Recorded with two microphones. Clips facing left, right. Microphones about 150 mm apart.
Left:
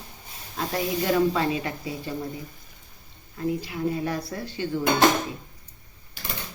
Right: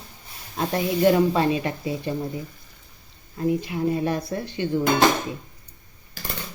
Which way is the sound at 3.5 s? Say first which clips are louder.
Right 4 dB; 25° right (ahead or behind).